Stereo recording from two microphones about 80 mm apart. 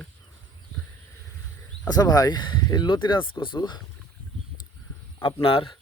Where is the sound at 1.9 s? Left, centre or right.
Left.